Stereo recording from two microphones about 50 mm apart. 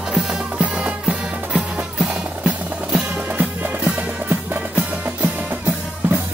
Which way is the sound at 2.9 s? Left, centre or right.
Right.